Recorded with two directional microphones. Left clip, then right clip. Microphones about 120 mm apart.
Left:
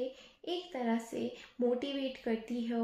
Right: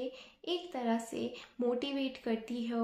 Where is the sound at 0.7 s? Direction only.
35° right (ahead or behind).